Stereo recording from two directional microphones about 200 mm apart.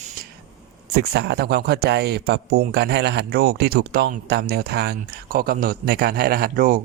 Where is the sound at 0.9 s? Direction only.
55° right (ahead or behind).